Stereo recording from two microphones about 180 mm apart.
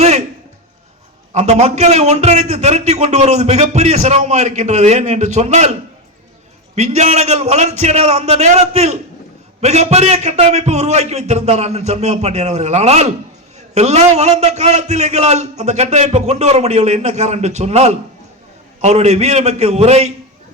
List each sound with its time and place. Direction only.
1.3 s a man's voice: 40° right (ahead or behind)
6.7 s a man's voice: 40° right (ahead or behind)